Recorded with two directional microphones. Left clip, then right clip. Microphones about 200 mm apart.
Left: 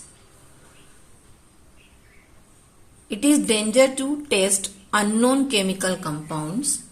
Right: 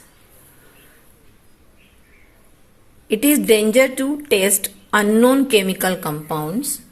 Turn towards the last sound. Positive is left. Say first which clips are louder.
# right 5 dB
turn(degrees=-20)  # may be behind; listen again after turning